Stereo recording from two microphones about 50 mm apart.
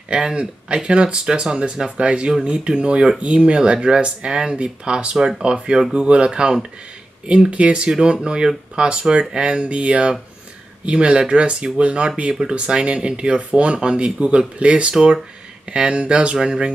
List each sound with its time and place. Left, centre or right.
0.1 s speech: centre
5.1 s speech: centre
5.4 s speech: centre